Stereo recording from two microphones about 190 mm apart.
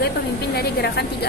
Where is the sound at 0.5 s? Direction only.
60° left (ahead or behind).